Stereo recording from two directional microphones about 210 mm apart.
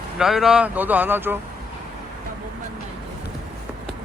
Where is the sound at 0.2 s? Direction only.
Centre (ahead or behind).